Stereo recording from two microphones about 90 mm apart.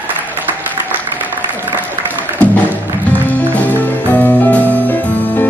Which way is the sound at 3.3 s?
20° left (ahead or behind).